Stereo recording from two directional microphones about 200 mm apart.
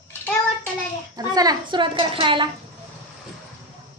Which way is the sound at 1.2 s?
20° right (ahead or behind).